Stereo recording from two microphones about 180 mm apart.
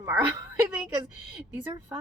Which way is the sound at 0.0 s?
15° right (ahead or behind).